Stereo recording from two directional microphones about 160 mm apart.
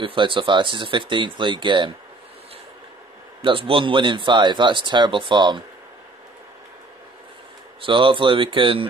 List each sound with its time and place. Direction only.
0.0 s speech: 30° right (ahead or behind)
3.4 s speech: 35° right (ahead or behind)
7.8 s speech: 30° right (ahead or behind)